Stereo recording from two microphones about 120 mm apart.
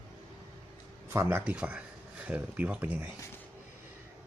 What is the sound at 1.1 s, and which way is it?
Speech, 20° right (ahead or behind).